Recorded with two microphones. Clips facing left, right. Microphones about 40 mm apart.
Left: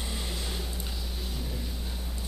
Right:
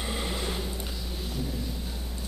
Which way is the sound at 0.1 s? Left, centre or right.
Right.